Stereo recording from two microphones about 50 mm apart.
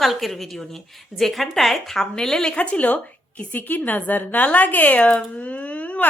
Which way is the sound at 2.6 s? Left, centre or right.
Left.